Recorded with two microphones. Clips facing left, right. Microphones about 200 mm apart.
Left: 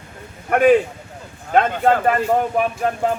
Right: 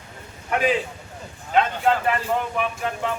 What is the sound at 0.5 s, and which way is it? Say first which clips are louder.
Speech: left 8 dB; 55° left (ahead or behind).